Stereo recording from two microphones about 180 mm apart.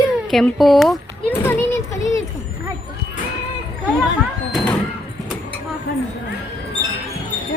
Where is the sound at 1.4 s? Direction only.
15° left (ahead or behind).